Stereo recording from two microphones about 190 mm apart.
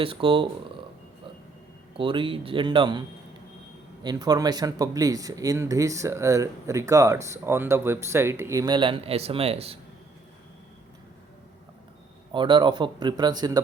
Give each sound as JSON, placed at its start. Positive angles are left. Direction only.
{"t": 0.0, "sound": "speech", "side_deg": -30}
{"t": 2.0, "sound": "speech", "side_deg": -25}
{"t": 4.0, "sound": "speech", "side_deg": -20}
{"t": 12.3, "sound": "speech", "side_deg": -25}